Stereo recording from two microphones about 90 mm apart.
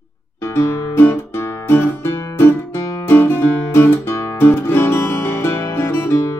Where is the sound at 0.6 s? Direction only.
25° left (ahead or behind).